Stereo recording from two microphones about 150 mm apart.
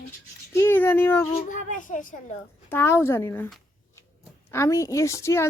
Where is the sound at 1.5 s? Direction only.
60° left (ahead or behind).